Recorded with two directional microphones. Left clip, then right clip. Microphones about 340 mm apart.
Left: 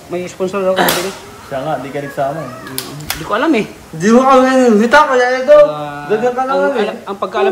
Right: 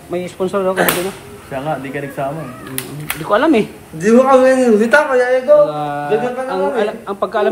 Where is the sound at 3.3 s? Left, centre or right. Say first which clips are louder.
Right 2 dB; centre.